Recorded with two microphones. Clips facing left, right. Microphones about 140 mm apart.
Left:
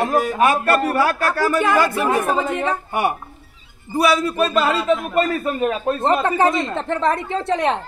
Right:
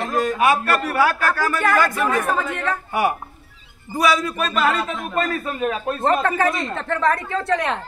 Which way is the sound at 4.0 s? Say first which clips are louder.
Left 3 dB; 30° left (ahead or behind).